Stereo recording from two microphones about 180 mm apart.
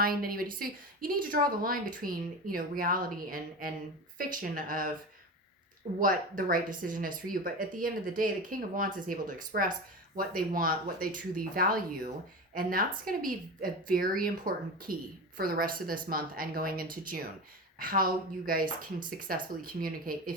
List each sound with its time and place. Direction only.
0.0 s speech: 55° right (ahead or behind)
6.0 s speech: 50° right (ahead or behind)